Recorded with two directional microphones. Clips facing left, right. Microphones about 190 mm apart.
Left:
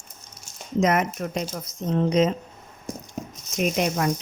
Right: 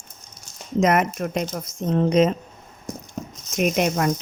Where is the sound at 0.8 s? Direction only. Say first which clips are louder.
Right 2 dB; 55° right (ahead or behind).